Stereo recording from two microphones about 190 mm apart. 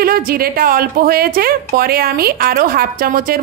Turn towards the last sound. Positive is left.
turn(degrees=-50)  # may be behind; listen again after turning